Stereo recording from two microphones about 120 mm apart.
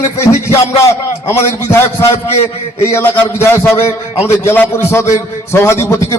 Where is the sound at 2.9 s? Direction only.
20° left (ahead or behind).